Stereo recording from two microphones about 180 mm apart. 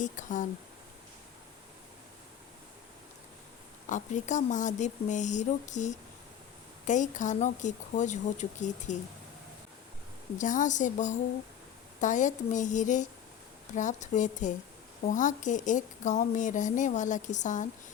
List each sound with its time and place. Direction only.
0.0 s a woman's voice: 45° left (ahead or behind)
3.8 s a woman's voice: 45° left (ahead or behind)
10.3 s a woman's voice: 45° left (ahead or behind)